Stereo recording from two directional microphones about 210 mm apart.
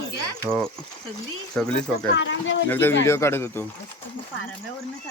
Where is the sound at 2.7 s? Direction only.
10° left (ahead or behind).